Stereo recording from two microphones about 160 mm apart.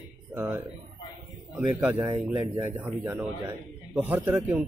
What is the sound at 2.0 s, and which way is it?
Speech, 30° right (ahead or behind).